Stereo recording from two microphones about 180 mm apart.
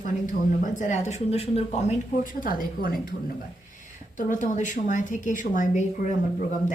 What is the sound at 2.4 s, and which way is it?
Speech, 50° left (ahead or behind).